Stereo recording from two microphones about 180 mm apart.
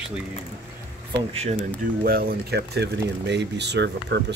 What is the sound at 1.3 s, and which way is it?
Speech, 35° right (ahead or behind).